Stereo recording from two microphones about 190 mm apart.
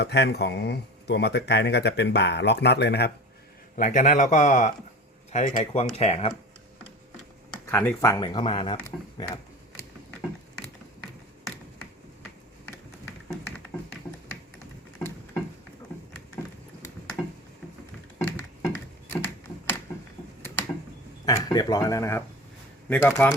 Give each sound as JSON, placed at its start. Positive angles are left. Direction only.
{"t": 0.0, "sound": "speech", "side_deg": 60}
{"t": 3.8, "sound": "speech", "side_deg": 45}
{"t": 7.5, "sound": "speech", "side_deg": 10}
{"t": 13.7, "sound": "tap", "side_deg": 15}
{"t": 18.2, "sound": "a sound", "side_deg": 10}
{"t": 21.2, "sound": "speech", "side_deg": 20}